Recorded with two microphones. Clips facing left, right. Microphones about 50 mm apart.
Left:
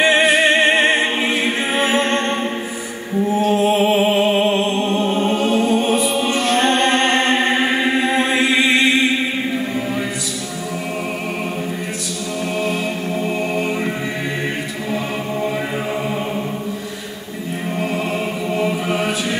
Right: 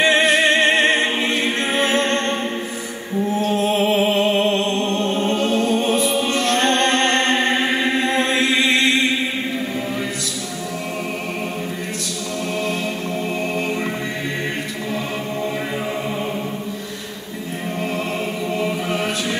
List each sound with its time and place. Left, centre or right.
0.0 s music: centre
18.5 s chant: centre